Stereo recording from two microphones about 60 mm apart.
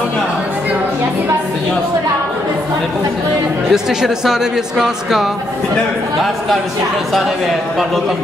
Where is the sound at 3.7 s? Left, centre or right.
Centre.